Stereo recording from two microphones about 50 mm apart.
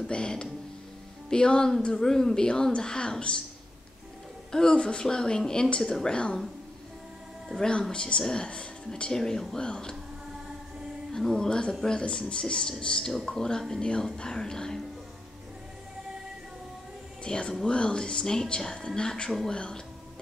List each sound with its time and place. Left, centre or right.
0.0 s speech: centre
4.5 s speech: centre
7.9 s speech: centre
11.1 s speech: centre
17.2 s speech: centre